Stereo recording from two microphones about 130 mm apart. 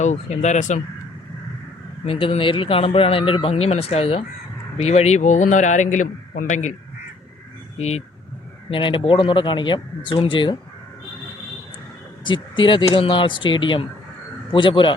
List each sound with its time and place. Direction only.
0.0 s speech: 65° left (ahead or behind)
2.0 s a man's voice: 45° left (ahead or behind); by 6.7 s 65° left (ahead or behind)
7.8 s speech: 55° left (ahead or behind)
8.7 s speech: 40° left (ahead or behind)
12.2 s speech: 40° left (ahead or behind)